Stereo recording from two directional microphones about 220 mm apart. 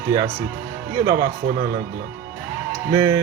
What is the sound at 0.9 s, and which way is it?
Speech, 15° right (ahead or behind).